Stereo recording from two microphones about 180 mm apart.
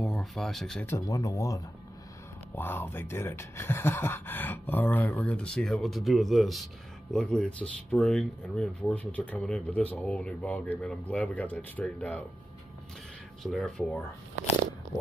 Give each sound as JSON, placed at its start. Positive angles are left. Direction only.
{"t": 0.0, "sound": "speech", "side_deg": 0}
{"t": 13.4, "sound": "speech", "side_deg": 0}